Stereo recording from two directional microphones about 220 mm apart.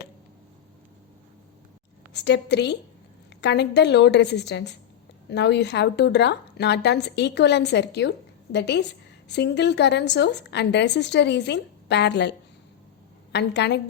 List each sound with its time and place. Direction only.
2.1 s speech: 50° left (ahead or behind)
13.3 s speech: 50° left (ahead or behind)